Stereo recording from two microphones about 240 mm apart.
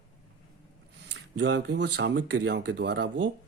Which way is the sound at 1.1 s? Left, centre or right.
Right.